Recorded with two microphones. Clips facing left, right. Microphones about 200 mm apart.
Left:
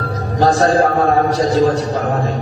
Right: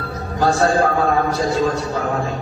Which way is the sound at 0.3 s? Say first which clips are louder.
Left 3 dB; 35° left (ahead or behind).